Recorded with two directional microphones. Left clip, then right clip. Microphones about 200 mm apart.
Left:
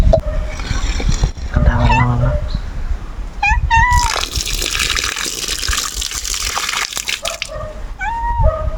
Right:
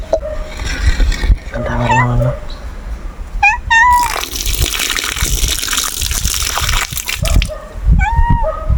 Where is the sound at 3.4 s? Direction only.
25° right (ahead or behind).